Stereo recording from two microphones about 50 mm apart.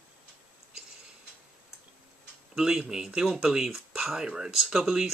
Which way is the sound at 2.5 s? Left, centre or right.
Centre.